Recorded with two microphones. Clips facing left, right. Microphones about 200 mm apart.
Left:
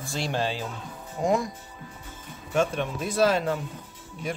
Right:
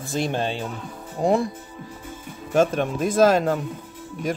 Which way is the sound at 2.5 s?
45° right (ahead or behind).